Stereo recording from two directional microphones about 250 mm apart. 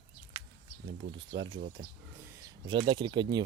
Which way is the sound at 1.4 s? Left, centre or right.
Centre.